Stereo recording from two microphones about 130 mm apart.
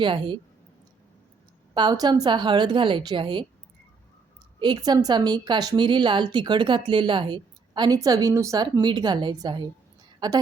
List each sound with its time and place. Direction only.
0.0 s a woman's voice: 40° right (ahead or behind)
1.7 s a woman's voice: 35° right (ahead or behind)
4.6 s a woman's voice: 35° right (ahead or behind)